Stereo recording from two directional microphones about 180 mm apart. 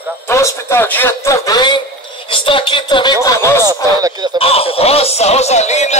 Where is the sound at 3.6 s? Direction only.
20° right (ahead or behind).